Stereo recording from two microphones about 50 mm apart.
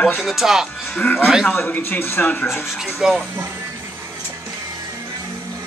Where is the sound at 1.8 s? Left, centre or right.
Left.